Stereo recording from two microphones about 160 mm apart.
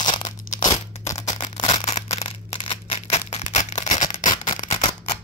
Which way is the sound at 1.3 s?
35° left (ahead or behind).